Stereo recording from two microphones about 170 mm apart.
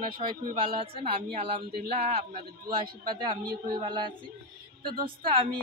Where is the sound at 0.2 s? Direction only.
35° right (ahead or behind).